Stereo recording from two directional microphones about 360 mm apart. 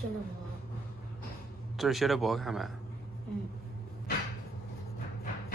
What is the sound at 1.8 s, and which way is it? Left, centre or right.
Speech, centre.